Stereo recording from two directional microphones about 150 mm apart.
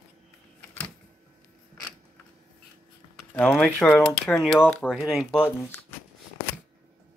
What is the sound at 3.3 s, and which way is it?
Speech, centre (ahead or behind).